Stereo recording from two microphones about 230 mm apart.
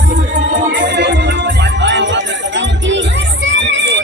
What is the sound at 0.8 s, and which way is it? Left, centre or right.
Music, right.